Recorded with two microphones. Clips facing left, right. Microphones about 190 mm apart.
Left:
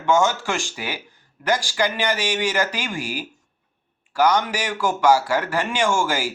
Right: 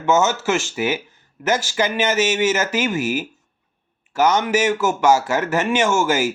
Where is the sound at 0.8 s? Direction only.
20° right (ahead or behind).